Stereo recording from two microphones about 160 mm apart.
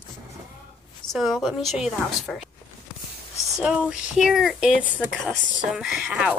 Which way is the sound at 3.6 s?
5° right (ahead or behind).